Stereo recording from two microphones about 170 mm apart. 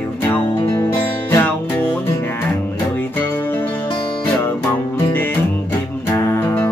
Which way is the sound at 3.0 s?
10° left (ahead or behind).